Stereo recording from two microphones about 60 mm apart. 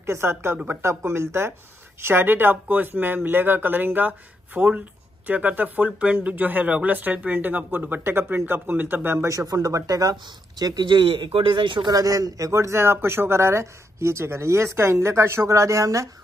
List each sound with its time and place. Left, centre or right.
0.0 s a man's voice: right
9.3 s speech: right
11.9 s a man's voice: right